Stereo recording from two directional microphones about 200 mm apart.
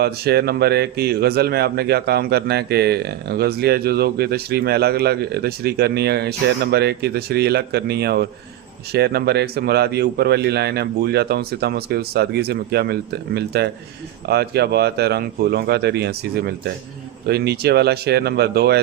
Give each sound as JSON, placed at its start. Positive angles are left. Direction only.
{"t": 0.0, "sound": "speech", "side_deg": -55}